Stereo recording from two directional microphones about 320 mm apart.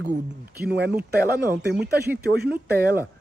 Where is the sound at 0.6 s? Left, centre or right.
Right.